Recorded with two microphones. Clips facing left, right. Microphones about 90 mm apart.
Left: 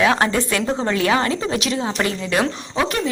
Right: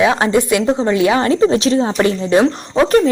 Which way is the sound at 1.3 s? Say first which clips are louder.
Right 9 dB; 30° right (ahead or behind).